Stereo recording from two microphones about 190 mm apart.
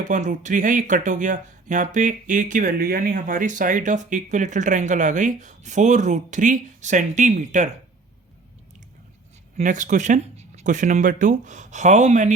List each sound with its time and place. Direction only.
0.0 s speech: 40° right (ahead or behind)
9.6 s speech: 40° right (ahead or behind)